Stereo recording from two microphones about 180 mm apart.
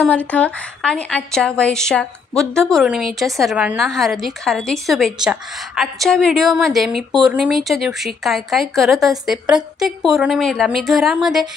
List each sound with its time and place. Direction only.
0.3 s a woman's voice: 5° left (ahead or behind)